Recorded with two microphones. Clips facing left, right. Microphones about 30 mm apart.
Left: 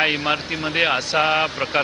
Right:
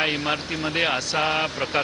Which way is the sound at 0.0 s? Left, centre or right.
Centre.